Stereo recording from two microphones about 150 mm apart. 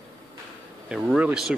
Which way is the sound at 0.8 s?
5° right (ahead or behind).